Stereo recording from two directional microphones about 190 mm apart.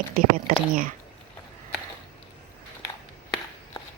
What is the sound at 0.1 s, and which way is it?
Speech, 50° right (ahead or behind).